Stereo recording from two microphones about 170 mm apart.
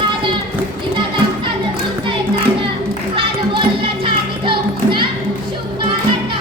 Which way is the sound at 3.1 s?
30° right (ahead or behind).